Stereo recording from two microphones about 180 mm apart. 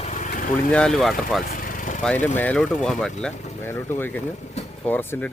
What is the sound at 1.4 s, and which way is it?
Vehicle, 50° left (ahead or behind).